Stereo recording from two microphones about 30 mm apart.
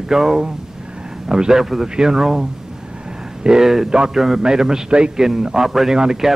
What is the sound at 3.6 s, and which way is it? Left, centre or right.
Speech, centre.